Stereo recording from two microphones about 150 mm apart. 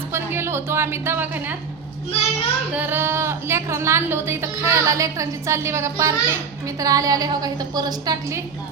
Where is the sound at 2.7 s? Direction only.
15° right (ahead or behind).